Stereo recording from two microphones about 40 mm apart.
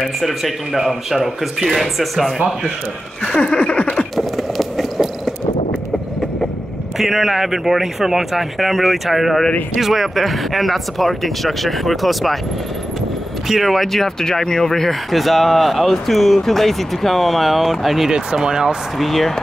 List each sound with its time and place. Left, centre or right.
0.2 s speech: centre
3.3 s a sound: left
4.4 s run: centre
7.0 s speech: centre
13.5 s speech: centre
14.2 s speech: centre
18.1 s speech: centre
18.9 s speech: centre